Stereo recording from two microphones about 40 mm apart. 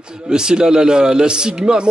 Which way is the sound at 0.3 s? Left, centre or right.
Centre.